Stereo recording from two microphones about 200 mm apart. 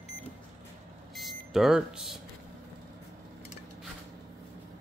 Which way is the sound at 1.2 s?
Centre (ahead or behind).